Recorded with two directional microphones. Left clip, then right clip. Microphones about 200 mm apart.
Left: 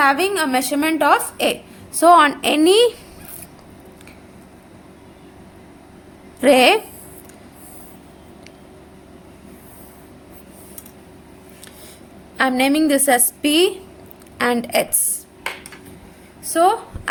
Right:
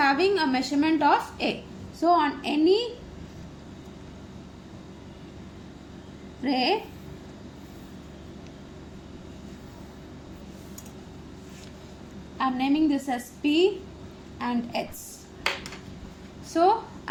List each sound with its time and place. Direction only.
0.0 s a woman's voice: 30° left (ahead or behind)
2.0 s a woman's voice: 45° left (ahead or behind)
6.4 s a woman's voice: 45° left (ahead or behind)
12.4 s a woman's voice: 45° left (ahead or behind)
16.5 s a woman's voice: 30° left (ahead or behind)